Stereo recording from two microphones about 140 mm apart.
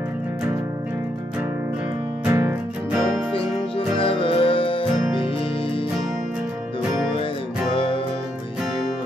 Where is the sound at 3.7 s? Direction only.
40° left (ahead or behind).